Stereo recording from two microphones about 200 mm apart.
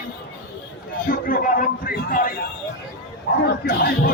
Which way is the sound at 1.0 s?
45° left (ahead or behind).